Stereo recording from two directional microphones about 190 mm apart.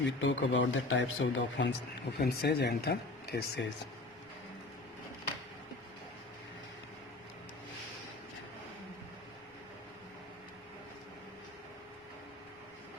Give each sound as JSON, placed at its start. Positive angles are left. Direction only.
{"t": 0.0, "sound": "a man's voice", "side_deg": 70}
{"t": 2.1, "sound": "speech", "side_deg": 55}